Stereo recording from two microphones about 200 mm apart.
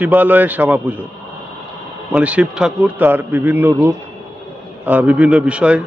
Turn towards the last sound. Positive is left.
turn(degrees=-5)  # may be behind; listen again after turning